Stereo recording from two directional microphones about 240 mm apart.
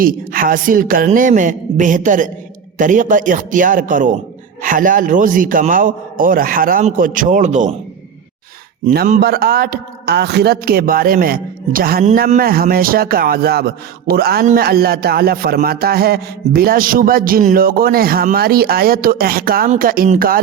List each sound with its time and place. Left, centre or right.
0.0 s speech: right
8.9 s speech: right